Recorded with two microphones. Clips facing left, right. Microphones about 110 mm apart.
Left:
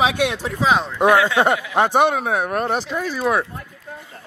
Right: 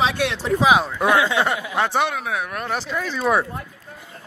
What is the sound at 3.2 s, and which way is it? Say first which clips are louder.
Speech: right 1 dB; centre (ahead or behind).